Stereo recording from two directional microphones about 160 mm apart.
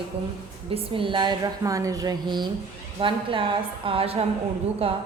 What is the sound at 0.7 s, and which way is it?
A woman's voice, 35° right (ahead or behind).